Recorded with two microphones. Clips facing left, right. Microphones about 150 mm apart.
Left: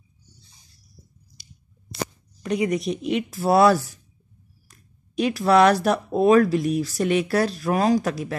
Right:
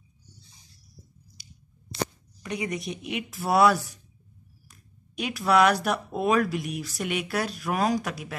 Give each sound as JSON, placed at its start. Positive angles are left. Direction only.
{"t": 2.4, "sound": "speech", "side_deg": 35}